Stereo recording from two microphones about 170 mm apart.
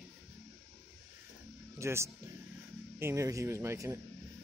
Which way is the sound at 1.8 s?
15° right (ahead or behind).